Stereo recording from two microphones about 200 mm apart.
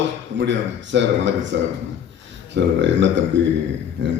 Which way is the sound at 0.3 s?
65° right (ahead or behind).